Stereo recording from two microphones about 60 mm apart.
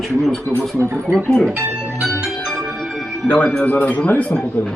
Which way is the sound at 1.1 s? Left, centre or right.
Centre.